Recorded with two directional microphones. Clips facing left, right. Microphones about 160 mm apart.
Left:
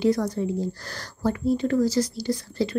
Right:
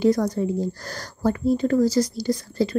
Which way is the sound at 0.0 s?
45° right (ahead or behind).